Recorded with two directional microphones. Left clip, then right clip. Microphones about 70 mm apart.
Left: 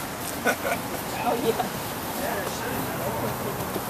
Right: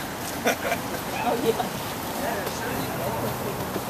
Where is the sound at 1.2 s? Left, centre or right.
Right.